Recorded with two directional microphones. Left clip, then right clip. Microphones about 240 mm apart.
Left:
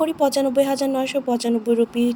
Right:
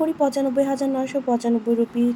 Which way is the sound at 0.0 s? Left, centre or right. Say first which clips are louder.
Left 2 dB; left.